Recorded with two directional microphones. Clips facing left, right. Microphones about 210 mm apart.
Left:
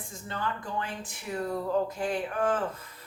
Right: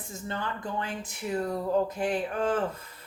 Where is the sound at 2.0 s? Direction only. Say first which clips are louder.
Right 2 dB; 20° right (ahead or behind).